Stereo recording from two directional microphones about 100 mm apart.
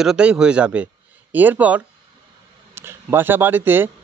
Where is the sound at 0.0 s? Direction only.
10° right (ahead or behind).